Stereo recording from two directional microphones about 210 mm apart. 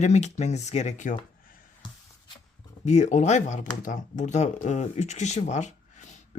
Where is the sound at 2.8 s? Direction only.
35° left (ahead or behind).